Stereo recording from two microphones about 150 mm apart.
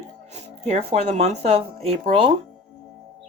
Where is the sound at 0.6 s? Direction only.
45° right (ahead or behind).